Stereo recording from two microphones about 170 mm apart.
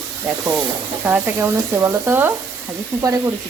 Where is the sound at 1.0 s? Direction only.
15° right (ahead or behind).